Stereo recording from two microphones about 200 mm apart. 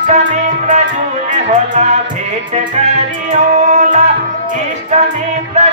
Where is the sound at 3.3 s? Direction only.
35° right (ahead or behind).